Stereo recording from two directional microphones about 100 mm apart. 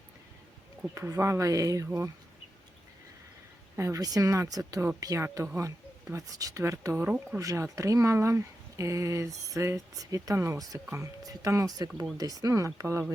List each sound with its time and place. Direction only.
0.9 s speech: 30° right (ahead or behind)
3.8 s speech: 35° right (ahead or behind)
6.9 s speech: 15° right (ahead or behind)
7.3 s speech: 30° right (ahead or behind)